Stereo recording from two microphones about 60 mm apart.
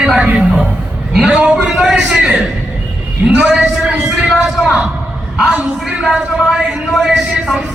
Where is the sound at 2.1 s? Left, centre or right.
Centre.